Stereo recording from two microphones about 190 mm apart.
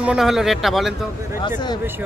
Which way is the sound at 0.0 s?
5° right (ahead or behind).